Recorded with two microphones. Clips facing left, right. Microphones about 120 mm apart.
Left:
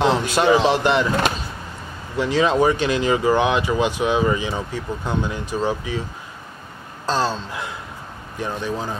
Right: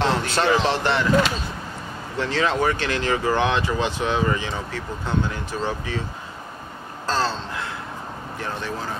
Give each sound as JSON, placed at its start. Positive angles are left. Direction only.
{"t": 0.0, "sound": "a man's voice", "side_deg": 15}
{"t": 2.1, "sound": "speech", "side_deg": 15}
{"t": 7.1, "sound": "speech", "side_deg": 15}